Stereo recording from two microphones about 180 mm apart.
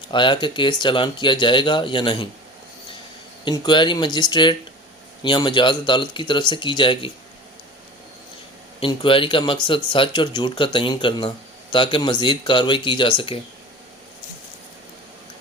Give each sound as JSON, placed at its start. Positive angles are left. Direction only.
{"t": 0.1, "sound": "speech", "side_deg": 25}
{"t": 3.4, "sound": "speech", "side_deg": 25}
{"t": 8.8, "sound": "speech", "side_deg": 25}